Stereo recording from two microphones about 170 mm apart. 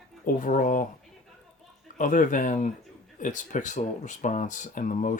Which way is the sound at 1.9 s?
50° left (ahead or behind).